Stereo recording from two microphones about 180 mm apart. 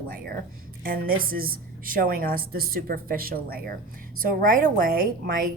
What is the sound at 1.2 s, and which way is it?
A woman's voice, 55° right (ahead or behind).